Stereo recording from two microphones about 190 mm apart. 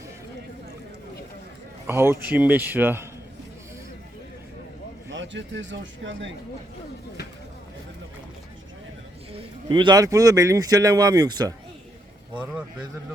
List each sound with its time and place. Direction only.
1.9 s speech: 10° right (ahead or behind)
5.1 s speech: 70° right (ahead or behind)
9.3 s speech: 25° right (ahead or behind)
12.4 s speech: 10° right (ahead or behind)